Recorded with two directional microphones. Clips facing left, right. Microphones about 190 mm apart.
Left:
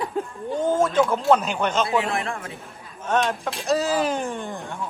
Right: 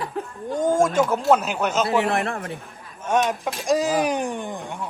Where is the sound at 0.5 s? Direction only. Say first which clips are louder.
Right 1 dB; 10° right (ahead or behind).